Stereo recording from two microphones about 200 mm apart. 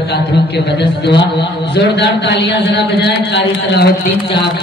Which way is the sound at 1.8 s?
60° left (ahead or behind).